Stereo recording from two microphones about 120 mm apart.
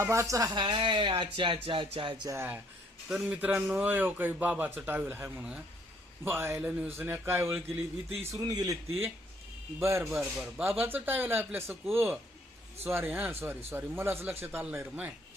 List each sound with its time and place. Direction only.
0.0 s a man's voice: 25° right (ahead or behind)
0.5 s speech: 40° right (ahead or behind)
2.2 s a man's voice: 20° right (ahead or behind)